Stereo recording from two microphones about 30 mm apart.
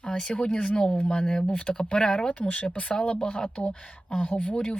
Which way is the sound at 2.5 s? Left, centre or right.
Left.